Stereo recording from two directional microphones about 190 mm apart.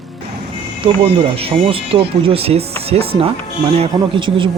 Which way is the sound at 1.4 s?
30° right (ahead or behind).